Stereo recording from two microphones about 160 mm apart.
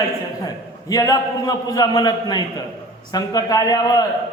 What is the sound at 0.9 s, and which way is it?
A man's voice, 20° left (ahead or behind).